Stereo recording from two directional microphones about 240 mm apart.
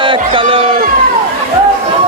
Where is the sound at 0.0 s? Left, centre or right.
Right.